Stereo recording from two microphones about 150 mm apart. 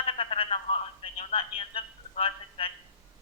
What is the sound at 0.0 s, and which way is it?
Speech, 40° left (ahead or behind).